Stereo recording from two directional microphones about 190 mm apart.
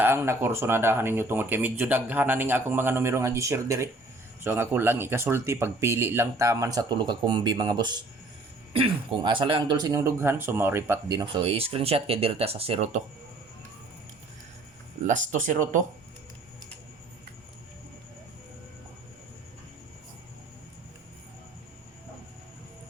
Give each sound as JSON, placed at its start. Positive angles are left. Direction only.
{"t": 0.0, "sound": "speech", "side_deg": -10}
{"t": 15.0, "sound": "speech", "side_deg": -40}